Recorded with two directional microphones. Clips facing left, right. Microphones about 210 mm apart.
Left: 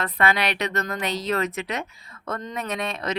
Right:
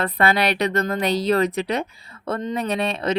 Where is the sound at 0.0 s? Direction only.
35° right (ahead or behind).